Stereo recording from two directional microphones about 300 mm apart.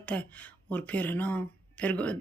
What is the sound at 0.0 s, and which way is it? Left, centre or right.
Speech, centre.